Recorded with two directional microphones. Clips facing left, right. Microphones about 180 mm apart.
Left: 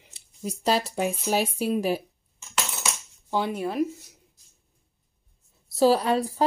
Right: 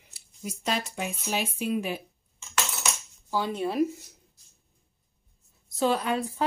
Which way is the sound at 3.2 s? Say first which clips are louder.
Left 2 dB; 20° left (ahead or behind).